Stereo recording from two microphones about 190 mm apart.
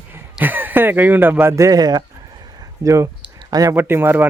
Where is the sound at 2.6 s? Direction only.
15° right (ahead or behind).